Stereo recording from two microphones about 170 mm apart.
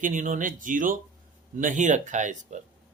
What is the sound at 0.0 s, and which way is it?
Speech, 50° right (ahead or behind).